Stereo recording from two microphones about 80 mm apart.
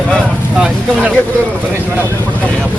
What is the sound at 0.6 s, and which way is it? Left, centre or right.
Speech, centre.